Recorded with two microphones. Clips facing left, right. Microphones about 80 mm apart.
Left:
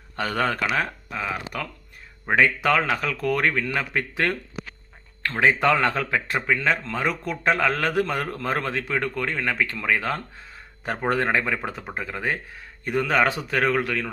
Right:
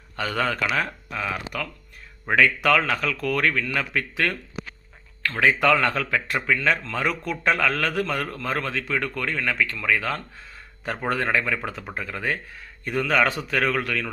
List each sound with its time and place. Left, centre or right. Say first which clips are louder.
0.2 s a man's voice: left 1 dB; left
7.6 s speech: left 1 dB; left